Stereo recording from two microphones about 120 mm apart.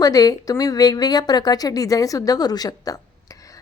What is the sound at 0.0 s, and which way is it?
Speech, 30° left (ahead or behind).